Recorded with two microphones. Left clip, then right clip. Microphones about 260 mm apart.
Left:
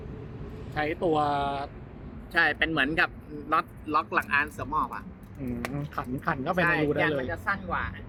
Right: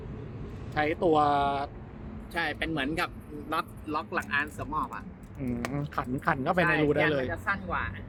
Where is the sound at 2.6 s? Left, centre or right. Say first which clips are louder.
Left 6 dB; left.